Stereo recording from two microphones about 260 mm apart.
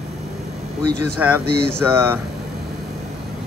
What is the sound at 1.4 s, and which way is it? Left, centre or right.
Speech, right.